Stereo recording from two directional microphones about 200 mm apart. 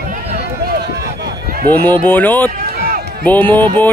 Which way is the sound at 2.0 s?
10° left (ahead or behind).